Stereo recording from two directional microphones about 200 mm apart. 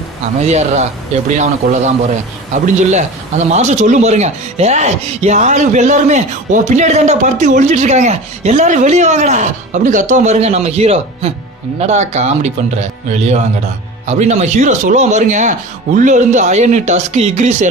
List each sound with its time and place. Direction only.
0.4 s speech: 35° right (ahead or behind)
14.0 s speech: 35° right (ahead or behind)